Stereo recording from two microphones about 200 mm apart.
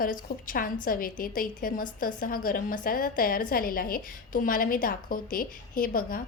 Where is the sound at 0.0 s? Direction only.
45° left (ahead or behind).